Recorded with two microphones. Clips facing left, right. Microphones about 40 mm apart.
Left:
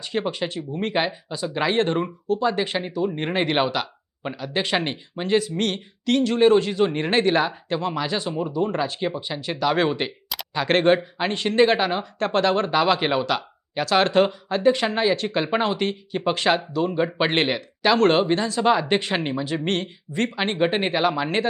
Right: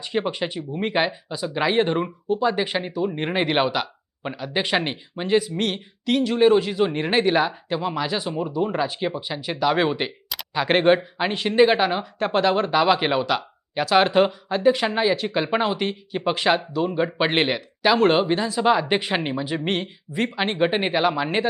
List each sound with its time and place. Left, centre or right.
0.0 s speech: centre